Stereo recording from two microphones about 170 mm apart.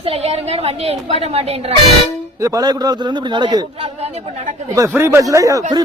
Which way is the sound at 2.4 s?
20° right (ahead or behind).